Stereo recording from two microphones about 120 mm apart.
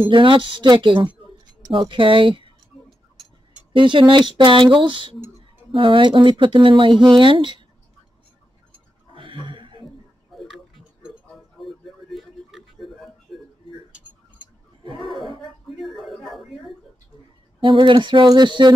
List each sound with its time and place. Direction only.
0.0 s speech: 45° right (ahead or behind)
3.7 s speech: 45° right (ahead or behind)
9.1 s a sound: 45° right (ahead or behind)
10.3 s tick-tock: 5° right (ahead or behind)
11.6 s music: centre (ahead or behind)
15.7 s a sound: centre (ahead or behind)
17.6 s speech: 45° right (ahead or behind)